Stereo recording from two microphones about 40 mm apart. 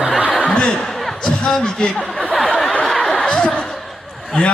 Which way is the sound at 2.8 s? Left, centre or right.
Centre.